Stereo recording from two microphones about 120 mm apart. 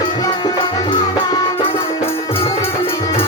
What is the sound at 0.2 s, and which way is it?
Music, 35° left (ahead or behind).